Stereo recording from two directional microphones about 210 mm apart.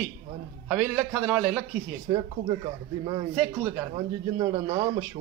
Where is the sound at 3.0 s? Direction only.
20° right (ahead or behind).